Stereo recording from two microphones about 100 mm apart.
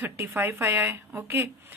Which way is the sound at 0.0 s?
20° right (ahead or behind).